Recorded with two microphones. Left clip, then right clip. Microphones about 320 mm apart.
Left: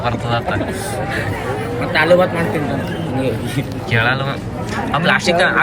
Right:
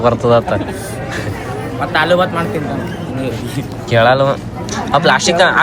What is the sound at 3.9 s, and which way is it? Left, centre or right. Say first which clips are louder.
Speech: right 7 dB; centre.